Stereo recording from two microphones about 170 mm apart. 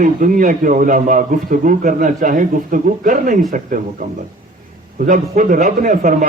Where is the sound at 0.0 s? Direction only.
50° right (ahead or behind).